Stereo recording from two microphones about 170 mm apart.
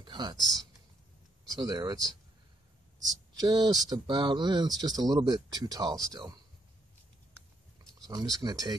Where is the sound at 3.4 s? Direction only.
25° right (ahead or behind).